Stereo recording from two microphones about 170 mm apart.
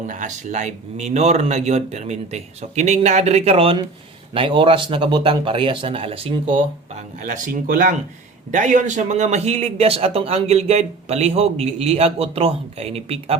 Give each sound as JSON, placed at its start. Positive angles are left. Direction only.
{"t": 0.1, "sound": "a man's voice", "side_deg": -45}
{"t": 7.2, "sound": "a man's voice", "side_deg": -50}